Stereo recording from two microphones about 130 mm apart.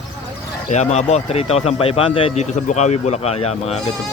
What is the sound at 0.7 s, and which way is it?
Speech, 60° left (ahead or behind).